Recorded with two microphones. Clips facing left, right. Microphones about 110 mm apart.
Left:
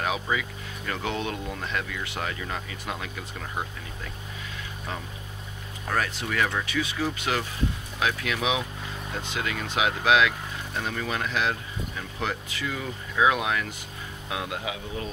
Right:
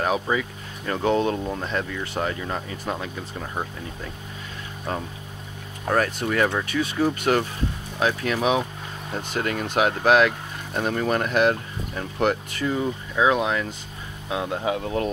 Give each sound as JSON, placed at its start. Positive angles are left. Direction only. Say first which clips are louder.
{"t": 0.0, "sound": "speech", "louder": "right 5 dB", "side_deg": -35}
{"t": 5.9, "sound": "speech", "louder": "right 5 dB", "side_deg": -45}
{"t": 12.6, "sound": "speech", "louder": "right 8 dB", "side_deg": -30}